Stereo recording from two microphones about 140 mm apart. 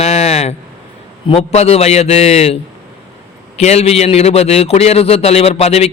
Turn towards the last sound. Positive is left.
turn(degrees=50)  # may be behind; listen again after turning